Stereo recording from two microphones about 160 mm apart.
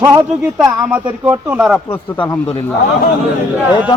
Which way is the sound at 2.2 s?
30° left (ahead or behind).